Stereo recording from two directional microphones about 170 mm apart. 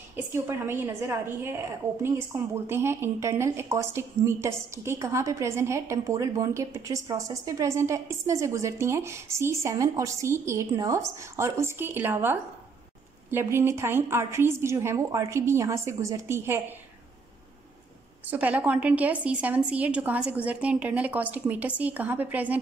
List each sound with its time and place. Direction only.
0.1 s a woman's voice: 15° right (ahead or behind)
18.3 s a woman's voice: 10° right (ahead or behind)